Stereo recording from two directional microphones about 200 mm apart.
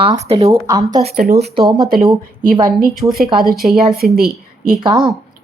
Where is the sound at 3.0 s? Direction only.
20° right (ahead or behind).